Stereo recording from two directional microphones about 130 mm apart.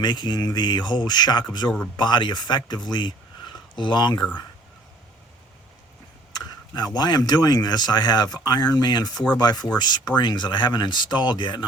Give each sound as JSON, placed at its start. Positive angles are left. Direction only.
{"t": 0.0, "sound": "speech", "side_deg": 35}
{"t": 6.3, "sound": "speech", "side_deg": 30}
{"t": 9.1, "sound": "speech", "side_deg": 10}
{"t": 9.4, "sound": "speech", "side_deg": 30}